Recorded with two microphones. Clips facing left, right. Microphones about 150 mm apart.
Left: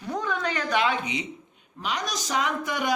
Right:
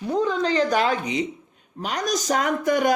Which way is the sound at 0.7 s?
40° right (ahead or behind).